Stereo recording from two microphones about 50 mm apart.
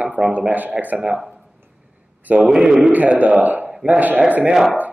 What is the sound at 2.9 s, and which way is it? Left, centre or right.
Speech, right.